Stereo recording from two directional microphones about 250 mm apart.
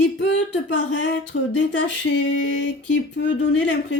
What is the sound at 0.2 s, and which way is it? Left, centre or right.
Speech, left.